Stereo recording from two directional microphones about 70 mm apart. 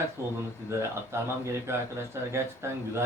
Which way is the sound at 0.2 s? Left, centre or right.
Right.